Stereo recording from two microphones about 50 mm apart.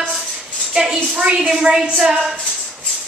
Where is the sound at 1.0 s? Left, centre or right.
Centre.